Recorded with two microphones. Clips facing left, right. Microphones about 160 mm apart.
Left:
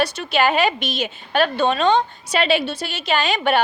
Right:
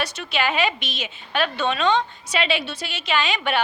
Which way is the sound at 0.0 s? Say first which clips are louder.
Left 6 dB; 40° left (ahead or behind).